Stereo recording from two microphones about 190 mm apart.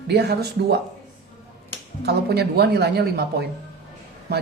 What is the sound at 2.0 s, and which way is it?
Speech, 60° right (ahead or behind).